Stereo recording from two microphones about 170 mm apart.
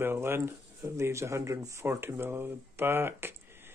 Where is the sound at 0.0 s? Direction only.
15° right (ahead or behind).